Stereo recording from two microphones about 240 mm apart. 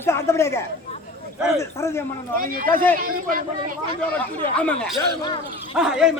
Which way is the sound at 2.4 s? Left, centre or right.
Right.